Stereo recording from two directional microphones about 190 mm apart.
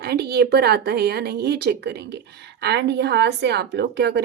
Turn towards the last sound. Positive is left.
turn(degrees=-60)  # may be behind; listen again after turning